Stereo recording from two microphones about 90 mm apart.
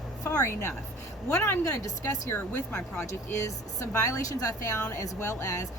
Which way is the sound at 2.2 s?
20° left (ahead or behind).